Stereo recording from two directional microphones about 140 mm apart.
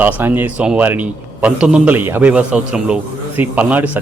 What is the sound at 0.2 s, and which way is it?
A man's voice, 15° right (ahead or behind).